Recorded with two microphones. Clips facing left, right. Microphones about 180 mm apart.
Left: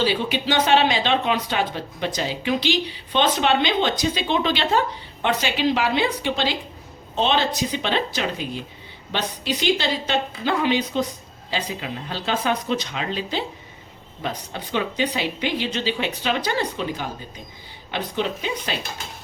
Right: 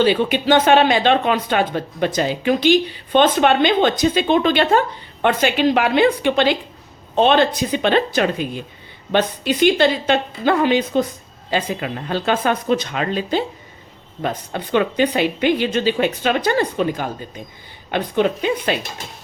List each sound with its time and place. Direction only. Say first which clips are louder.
0.0 s speech: right 6 dB; 55° right (ahead or behind)